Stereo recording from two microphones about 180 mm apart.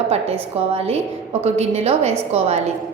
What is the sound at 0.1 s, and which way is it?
A woman's voice, 35° right (ahead or behind).